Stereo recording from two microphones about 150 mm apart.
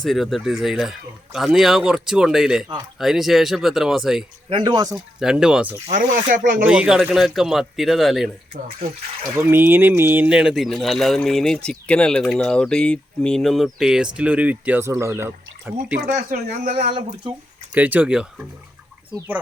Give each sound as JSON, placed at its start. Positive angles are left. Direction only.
{"t": 0.0, "sound": "speech", "side_deg": 0}
{"t": 4.4, "sound": "speech", "side_deg": -30}
{"t": 5.2, "sound": "speech", "side_deg": -5}
{"t": 5.9, "sound": "speech", "side_deg": -60}
{"t": 6.7, "sound": "speech", "side_deg": -5}
{"t": 9.4, "sound": "speech", "side_deg": -15}
{"t": 16.0, "sound": "speech", "side_deg": -60}
{"t": 17.7, "sound": "speech", "side_deg": -10}